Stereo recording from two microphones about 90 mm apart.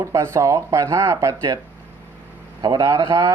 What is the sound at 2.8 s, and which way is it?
Speech, 35° right (ahead or behind).